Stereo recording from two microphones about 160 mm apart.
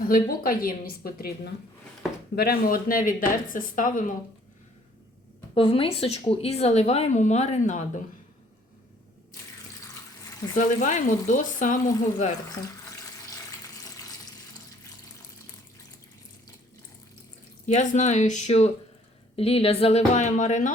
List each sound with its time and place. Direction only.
0.1 s speech: 65° left (ahead or behind)
2.3 s speech: 70° left (ahead or behind); by 4.0 s 55° left (ahead or behind)
5.5 s speech: 35° left (ahead or behind)
10.5 s speech: 50° left (ahead or behind)
12.5 s water tap: 20° left (ahead or behind)
17.7 s speech: 50° left (ahead or behind)